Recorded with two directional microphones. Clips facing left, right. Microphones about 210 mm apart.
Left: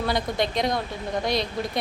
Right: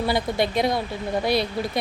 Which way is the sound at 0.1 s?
5° right (ahead or behind).